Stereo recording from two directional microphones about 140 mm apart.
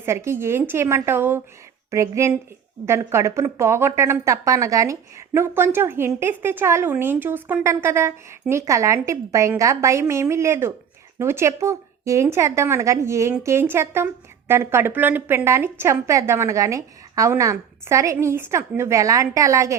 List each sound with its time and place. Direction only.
0.0 s a woman's voice: 20° right (ahead or behind)